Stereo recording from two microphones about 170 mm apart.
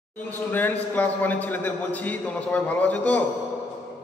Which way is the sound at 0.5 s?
10° left (ahead or behind).